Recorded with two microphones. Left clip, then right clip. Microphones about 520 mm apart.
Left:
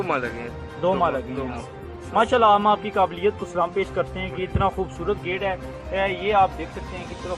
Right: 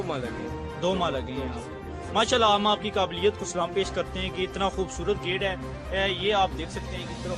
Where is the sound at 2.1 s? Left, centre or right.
Right.